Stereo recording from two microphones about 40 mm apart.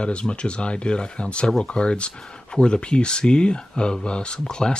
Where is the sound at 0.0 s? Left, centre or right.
Left.